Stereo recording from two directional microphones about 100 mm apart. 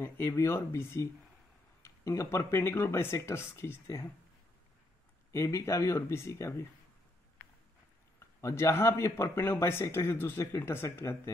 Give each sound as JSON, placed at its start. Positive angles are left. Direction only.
{"t": 0.0, "sound": "speech", "side_deg": 25}
{"t": 5.3, "sound": "speech", "side_deg": 30}
{"t": 8.4, "sound": "speech", "side_deg": 30}